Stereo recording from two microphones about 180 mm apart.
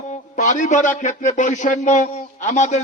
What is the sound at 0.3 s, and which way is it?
A man's voice, 45° left (ahead or behind).